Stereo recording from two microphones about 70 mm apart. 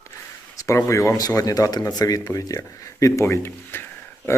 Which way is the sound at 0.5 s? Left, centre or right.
Left.